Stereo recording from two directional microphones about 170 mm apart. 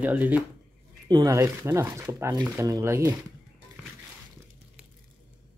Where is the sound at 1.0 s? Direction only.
20° right (ahead or behind).